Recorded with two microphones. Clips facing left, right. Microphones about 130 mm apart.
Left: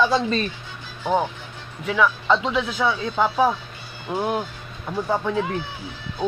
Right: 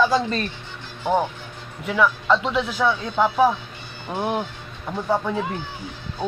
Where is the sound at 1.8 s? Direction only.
Centre (ahead or behind).